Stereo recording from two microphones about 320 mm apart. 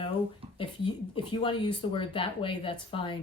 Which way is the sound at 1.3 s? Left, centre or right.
Centre.